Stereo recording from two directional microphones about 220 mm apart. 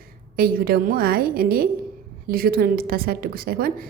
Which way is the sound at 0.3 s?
45° right (ahead or behind).